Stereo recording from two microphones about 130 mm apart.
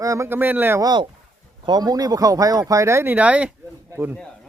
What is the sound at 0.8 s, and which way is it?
Speech, 35° right (ahead or behind).